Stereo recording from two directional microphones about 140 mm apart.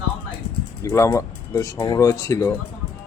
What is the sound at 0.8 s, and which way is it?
Speech, 20° left (ahead or behind).